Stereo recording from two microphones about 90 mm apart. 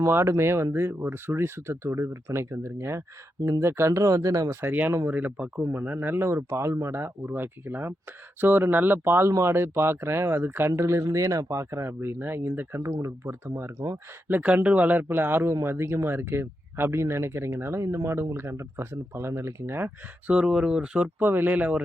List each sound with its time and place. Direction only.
0.0 s speech: 30° right (ahead or behind)
4.7 s speech: 20° right (ahead or behind); by 14.0 s 40° right (ahead or behind)
14.3 s speech: 20° right (ahead or behind)
20.3 s speech: 10° right (ahead or behind)
21.2 s speech: 25° right (ahead or behind)